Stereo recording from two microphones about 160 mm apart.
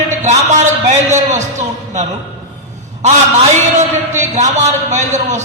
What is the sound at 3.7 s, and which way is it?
A man's voice, 45° right (ahead or behind).